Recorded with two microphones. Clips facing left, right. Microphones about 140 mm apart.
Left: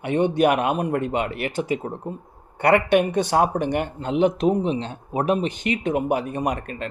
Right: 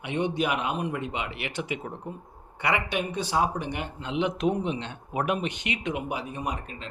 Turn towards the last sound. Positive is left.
turn(degrees=60)  # may be behind; listen again after turning